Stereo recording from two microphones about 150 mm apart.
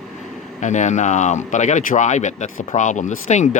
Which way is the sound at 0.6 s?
55° left (ahead or behind).